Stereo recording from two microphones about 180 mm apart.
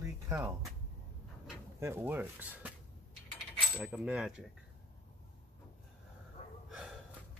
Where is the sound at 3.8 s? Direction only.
5° right (ahead or behind).